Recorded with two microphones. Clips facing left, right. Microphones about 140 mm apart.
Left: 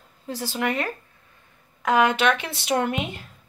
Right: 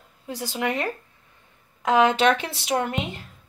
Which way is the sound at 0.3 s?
15° right (ahead or behind).